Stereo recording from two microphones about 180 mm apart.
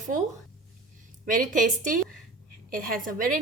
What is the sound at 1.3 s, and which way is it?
A woman's voice, 50° right (ahead or behind).